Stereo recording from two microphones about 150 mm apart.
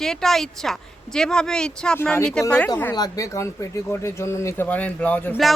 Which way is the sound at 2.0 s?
15° left (ahead or behind).